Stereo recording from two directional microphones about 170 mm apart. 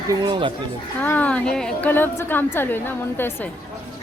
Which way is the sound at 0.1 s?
25° right (ahead or behind).